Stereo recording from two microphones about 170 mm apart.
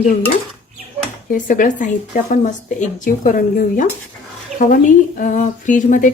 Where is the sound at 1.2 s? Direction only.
50° left (ahead or behind).